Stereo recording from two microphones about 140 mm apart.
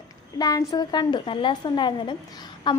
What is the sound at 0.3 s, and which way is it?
Speech, 30° left (ahead or behind).